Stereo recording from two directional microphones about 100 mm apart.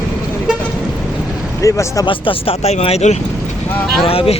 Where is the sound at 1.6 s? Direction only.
30° left (ahead or behind).